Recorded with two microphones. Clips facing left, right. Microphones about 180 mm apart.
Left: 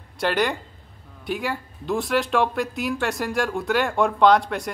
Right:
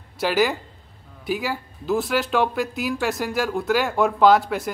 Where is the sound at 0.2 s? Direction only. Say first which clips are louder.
Right 2 dB; 5° right (ahead or behind).